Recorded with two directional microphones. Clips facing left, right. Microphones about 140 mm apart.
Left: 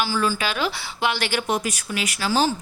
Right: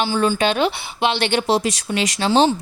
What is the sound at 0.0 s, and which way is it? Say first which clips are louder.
A woman's voice: right 5 dB; 25° right (ahead or behind).